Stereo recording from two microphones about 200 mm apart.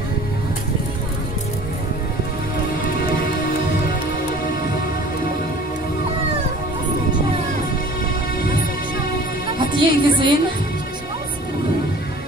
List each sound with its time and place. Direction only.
9.6 s music: 25° right (ahead or behind)